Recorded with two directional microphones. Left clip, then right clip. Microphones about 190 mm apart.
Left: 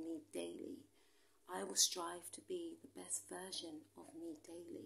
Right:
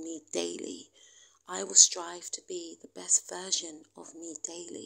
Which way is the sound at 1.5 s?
25° right (ahead or behind).